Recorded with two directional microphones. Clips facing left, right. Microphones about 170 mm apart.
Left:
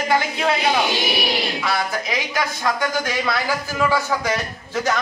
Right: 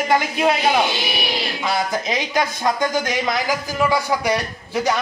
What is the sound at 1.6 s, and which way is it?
Speech, 20° right (ahead or behind).